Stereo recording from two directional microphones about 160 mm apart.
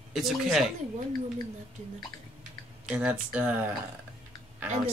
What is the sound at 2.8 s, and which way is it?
Speech, 5° right (ahead or behind).